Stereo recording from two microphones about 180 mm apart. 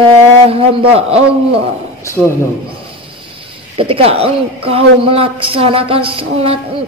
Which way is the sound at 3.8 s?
30° right (ahead or behind).